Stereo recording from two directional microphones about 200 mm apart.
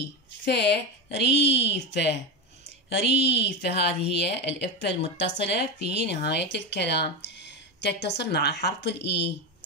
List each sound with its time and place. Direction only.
0.0 s a woman's voice: 60° left (ahead or behind)